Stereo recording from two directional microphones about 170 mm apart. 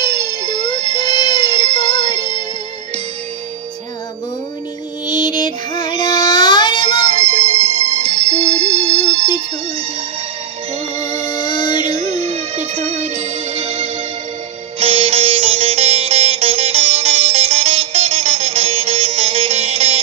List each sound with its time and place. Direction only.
0.4 s music: 40° right (ahead or behind)
5.0 s music: 25° left (ahead or behind)
7.1 s music: 40° right (ahead or behind)
11.0 s music: 25° left (ahead or behind)
11.9 s music: 40° right (ahead or behind)
14.8 s sitar: 35° right (ahead or behind)